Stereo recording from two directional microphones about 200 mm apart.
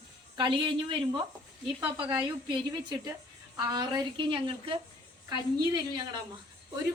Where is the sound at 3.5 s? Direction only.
20° right (ahead or behind).